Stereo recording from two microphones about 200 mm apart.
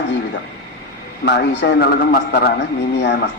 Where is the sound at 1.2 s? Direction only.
60° left (ahead or behind).